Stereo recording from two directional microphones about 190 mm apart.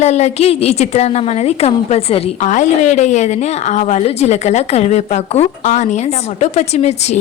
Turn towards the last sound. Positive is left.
turn(degrees=35)  # may be behind; listen again after turning